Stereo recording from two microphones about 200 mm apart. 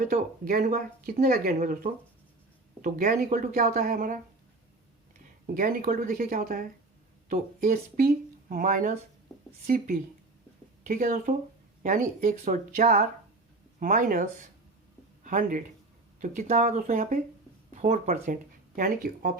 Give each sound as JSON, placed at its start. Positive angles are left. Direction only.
{"t": 0.0, "sound": "speech", "side_deg": -45}
{"t": 5.5, "sound": "speech", "side_deg": -45}